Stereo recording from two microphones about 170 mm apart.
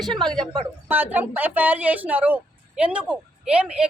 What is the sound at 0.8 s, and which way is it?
A woman's voice, 10° right (ahead or behind).